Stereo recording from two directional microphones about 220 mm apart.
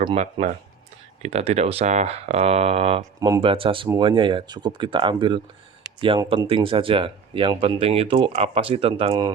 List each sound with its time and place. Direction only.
0.0 s speech: 25° right (ahead or behind)